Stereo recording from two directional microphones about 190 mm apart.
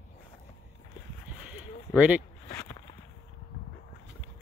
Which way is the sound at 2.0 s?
10° right (ahead or behind).